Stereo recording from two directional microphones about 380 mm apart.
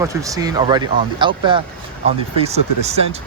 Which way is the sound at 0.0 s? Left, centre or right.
Centre.